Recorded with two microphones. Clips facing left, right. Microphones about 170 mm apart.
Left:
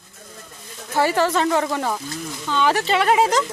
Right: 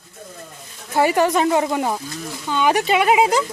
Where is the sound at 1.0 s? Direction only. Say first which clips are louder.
Right 2 dB; 15° right (ahead or behind).